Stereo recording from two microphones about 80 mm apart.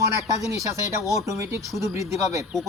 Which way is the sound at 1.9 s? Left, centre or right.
Right.